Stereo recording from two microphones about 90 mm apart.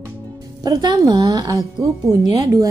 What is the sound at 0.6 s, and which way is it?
A woman's voice, 50° right (ahead or behind).